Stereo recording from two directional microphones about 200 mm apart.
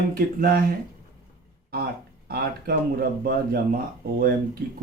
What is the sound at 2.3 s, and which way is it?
Speech, 50° right (ahead or behind).